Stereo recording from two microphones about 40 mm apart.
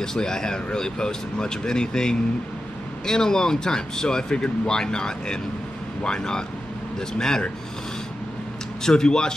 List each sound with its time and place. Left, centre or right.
0.0 s speech: centre
8.8 s speech: centre